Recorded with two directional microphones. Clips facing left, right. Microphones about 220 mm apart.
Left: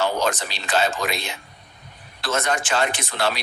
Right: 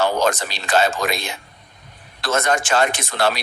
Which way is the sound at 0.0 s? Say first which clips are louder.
Right 4 dB; 45° right (ahead or behind).